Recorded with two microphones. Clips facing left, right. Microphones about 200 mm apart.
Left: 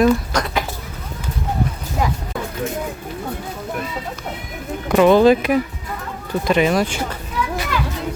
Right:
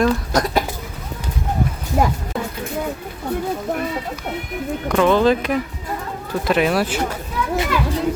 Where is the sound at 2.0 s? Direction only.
55° right (ahead or behind).